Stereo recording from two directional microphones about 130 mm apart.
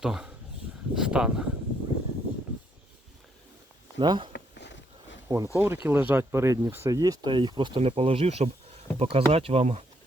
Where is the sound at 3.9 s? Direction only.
40° right (ahead or behind).